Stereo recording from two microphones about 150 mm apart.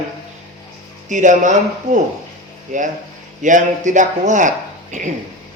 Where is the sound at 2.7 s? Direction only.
60° right (ahead or behind).